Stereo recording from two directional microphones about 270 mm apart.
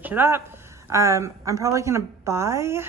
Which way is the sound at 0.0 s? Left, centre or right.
Centre.